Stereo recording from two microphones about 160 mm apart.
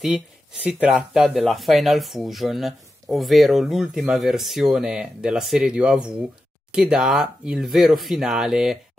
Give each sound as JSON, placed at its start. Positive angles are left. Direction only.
{"t": 0.7, "sound": "speech", "side_deg": -5}